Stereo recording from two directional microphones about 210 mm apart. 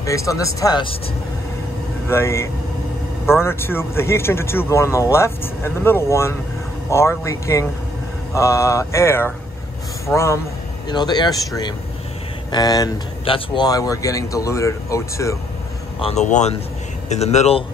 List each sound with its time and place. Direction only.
0.0 s speech: 15° left (ahead or behind)
2.0 s speech: 10° left (ahead or behind)
16.0 s a man's voice: 30° left (ahead or behind)